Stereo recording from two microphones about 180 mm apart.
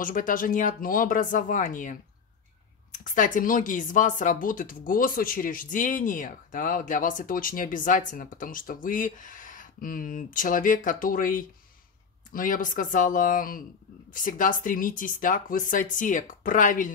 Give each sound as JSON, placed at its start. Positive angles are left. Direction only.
{"t": 0.0, "sound": "speech", "side_deg": 50}